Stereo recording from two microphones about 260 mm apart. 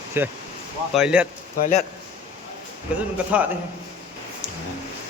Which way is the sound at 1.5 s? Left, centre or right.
Left.